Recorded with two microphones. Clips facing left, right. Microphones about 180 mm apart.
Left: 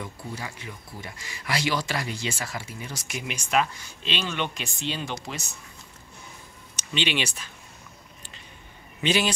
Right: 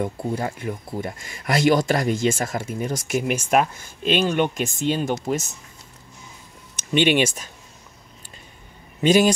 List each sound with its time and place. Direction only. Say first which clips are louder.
0.0 s speech: right 11 dB; 55° right (ahead or behind)
6.8 s speech: right 10 dB; 50° right (ahead or behind)
9.0 s speech: right 8 dB; 45° right (ahead or behind)